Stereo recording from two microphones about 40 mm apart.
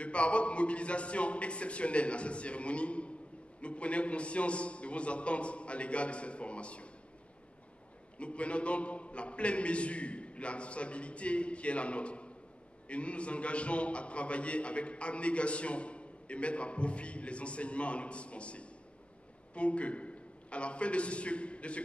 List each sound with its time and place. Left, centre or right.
0.0 s a man's voice: left
8.2 s a man's voice: left